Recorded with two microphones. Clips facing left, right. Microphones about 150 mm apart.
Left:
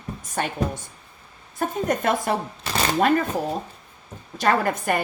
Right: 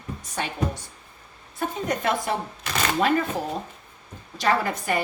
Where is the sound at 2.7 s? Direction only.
30° left (ahead or behind).